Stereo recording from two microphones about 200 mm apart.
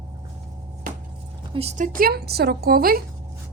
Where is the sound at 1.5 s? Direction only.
30° right (ahead or behind); by 3.0 s 50° right (ahead or behind).